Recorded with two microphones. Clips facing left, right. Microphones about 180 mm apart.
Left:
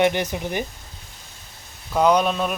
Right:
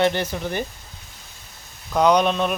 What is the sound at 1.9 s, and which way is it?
Speech, 5° left (ahead or behind).